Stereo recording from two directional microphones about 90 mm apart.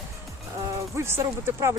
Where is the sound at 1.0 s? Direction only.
30° right (ahead or behind).